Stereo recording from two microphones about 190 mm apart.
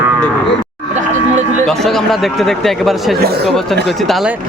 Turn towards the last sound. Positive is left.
turn(degrees=0)  # may be behind; listen again after turning